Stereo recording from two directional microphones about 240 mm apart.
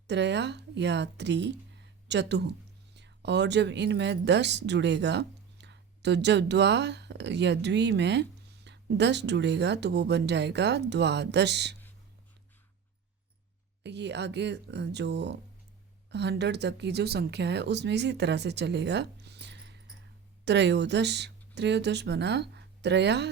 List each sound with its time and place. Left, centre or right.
0.1 s a woman's voice: right
13.8 s speech: right